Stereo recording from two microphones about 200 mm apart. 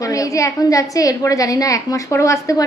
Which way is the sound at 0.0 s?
15° left (ahead or behind).